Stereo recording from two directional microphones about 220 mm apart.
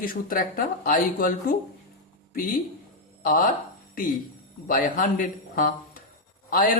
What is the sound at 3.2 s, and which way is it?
A man's voice, 40° left (ahead or behind).